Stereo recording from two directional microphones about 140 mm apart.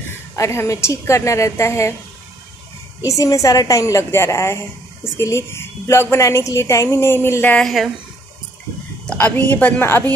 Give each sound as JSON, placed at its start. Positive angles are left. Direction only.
{"t": 0.4, "sound": "a woman's voice", "side_deg": 20}
{"t": 3.0, "sound": "a woman's voice", "side_deg": 25}
{"t": 7.6, "sound": "speech", "side_deg": 0}
{"t": 9.0, "sound": "a woman's voice", "side_deg": 10}